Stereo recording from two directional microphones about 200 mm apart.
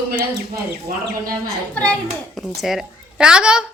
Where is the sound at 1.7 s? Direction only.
5° left (ahead or behind).